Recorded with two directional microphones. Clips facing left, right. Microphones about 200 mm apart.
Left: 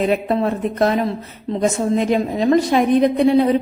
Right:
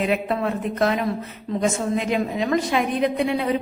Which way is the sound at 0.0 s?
35° left (ahead or behind).